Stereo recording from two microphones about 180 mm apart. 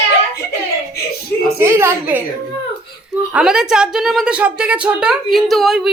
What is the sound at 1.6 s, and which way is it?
Speech, 15° right (ahead or behind).